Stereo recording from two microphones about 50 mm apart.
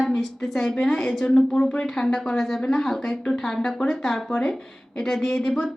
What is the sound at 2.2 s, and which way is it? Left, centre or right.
A woman's voice, centre.